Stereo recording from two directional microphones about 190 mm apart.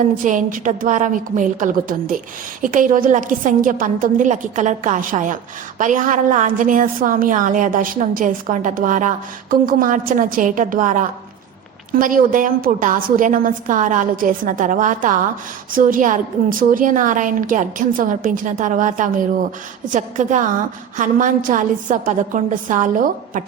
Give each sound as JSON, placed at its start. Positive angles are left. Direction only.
{"t": 0.3, "sound": "a woman's voice", "side_deg": -45}